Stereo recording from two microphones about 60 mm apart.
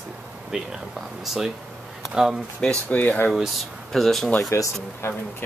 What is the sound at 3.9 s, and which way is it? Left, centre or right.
Speech, centre.